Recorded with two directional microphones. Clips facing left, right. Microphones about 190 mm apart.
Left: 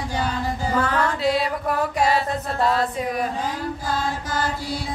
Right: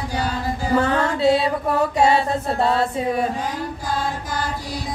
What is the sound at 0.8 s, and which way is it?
Chant, 25° right (ahead or behind).